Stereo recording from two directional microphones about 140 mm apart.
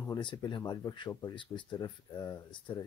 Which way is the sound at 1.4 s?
35° left (ahead or behind).